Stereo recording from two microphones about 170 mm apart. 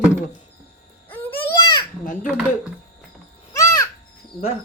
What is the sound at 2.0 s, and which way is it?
Speech, 50° left (ahead or behind).